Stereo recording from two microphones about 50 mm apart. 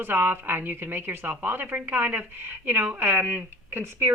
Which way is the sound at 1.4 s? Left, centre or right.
Right.